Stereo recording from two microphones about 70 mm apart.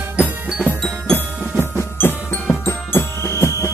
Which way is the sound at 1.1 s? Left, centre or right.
Left.